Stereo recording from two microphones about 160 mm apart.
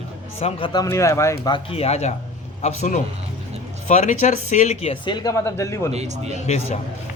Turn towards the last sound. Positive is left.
turn(degrees=45)  # may be behind; listen again after turning